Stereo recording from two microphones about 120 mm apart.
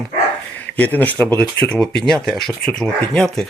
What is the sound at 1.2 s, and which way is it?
Speech, 15° left (ahead or behind).